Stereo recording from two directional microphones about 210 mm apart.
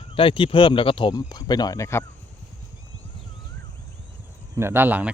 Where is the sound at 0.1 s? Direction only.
25° left (ahead or behind).